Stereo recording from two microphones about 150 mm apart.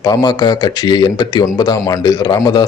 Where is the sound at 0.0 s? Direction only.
25° left (ahead or behind).